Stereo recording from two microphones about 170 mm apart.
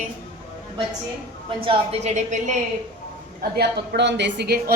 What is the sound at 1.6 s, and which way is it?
Speech, 40° right (ahead or behind).